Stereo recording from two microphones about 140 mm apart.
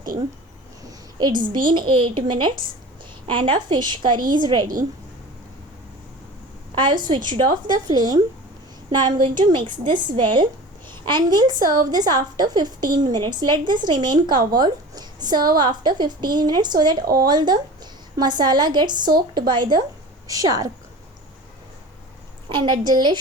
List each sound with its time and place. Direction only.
0.8 s a sound: 30° right (ahead or behind)
1.5 s a woman's voice: 35° right (ahead or behind)
6.7 s a woman's voice: 35° right (ahead or behind)
22.4 s a woman's voice: 35° right (ahead or behind)